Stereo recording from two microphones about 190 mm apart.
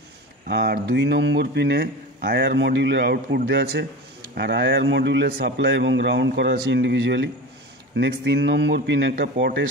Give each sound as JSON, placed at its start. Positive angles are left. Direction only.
{"t": 0.5, "sound": "speech", "side_deg": -55}
{"t": 4.4, "sound": "a man's voice", "side_deg": -65}